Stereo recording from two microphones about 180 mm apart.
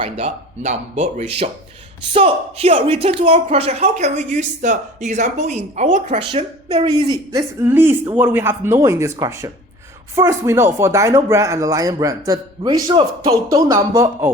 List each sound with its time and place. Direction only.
0.0 s speech: 35° right (ahead or behind)
6.1 s speech: 30° right (ahead or behind)
7.3 s speech: 15° right (ahead or behind)